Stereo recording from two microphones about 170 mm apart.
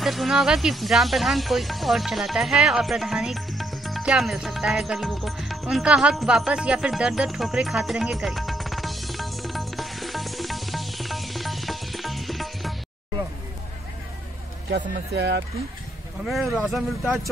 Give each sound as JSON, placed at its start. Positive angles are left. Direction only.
{"t": 0.0, "sound": "a sound", "side_deg": 0}
{"t": 15.1, "sound": "speech", "side_deg": -85}
{"t": 16.3, "sound": "speech", "side_deg": 0}
{"t": 17.0, "sound": "a man's voice", "side_deg": -10}